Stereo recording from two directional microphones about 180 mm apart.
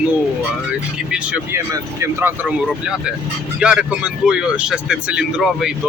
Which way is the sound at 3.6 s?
5° right (ahead or behind).